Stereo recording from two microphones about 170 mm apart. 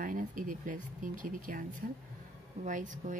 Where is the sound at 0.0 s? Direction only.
50° right (ahead or behind).